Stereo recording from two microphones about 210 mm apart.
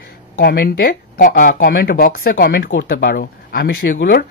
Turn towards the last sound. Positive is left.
turn(degrees=50)  # may be behind; listen again after turning